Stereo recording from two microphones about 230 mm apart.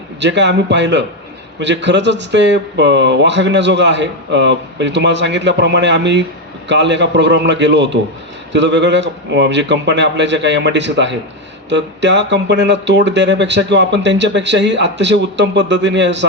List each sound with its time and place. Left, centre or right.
0.2 s speech: right